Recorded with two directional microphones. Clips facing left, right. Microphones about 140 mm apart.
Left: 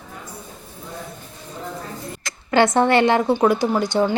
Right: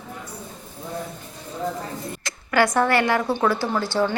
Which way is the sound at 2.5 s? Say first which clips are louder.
Left 3 dB; 25° left (ahead or behind).